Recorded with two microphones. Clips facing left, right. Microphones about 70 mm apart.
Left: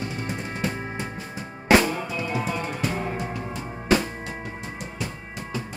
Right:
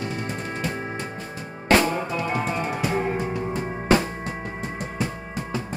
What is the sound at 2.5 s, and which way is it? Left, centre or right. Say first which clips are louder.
Music: right 3 dB; centre.